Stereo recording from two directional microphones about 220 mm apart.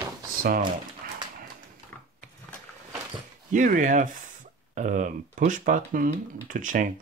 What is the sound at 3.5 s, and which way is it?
Speech, 35° right (ahead or behind).